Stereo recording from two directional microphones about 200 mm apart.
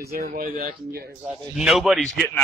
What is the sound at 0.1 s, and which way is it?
Speech, 50° right (ahead or behind).